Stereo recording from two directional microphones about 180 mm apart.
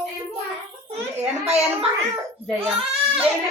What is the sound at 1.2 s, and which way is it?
Speech, 35° right (ahead or behind).